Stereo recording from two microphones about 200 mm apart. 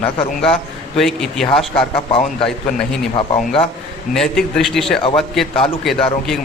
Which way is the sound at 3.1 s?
25° left (ahead or behind).